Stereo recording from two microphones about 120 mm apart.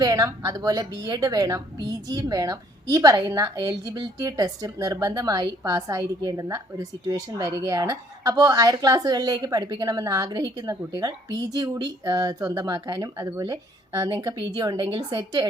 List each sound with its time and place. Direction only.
0.0 s a woman's voice: 30° right (ahead or behind)